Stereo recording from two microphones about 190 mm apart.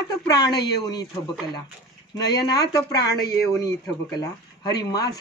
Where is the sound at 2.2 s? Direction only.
20° left (ahead or behind).